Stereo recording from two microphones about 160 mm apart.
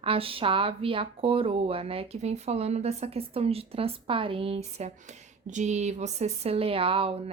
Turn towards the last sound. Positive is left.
turn(degrees=-35)  # may be behind; listen again after turning